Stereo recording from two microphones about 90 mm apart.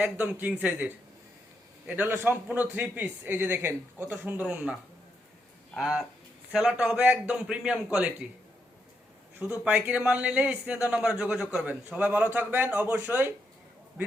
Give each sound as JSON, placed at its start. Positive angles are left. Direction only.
{"t": 0.0, "sound": "a man's voice", "side_deg": -15}
{"t": 9.6, "sound": "a man's voice", "side_deg": -15}